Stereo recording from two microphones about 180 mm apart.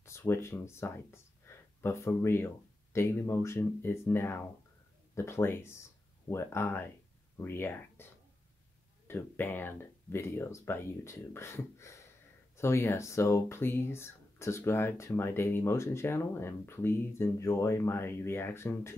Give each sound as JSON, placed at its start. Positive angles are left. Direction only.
{"t": 0.0, "sound": "speech", "side_deg": 15}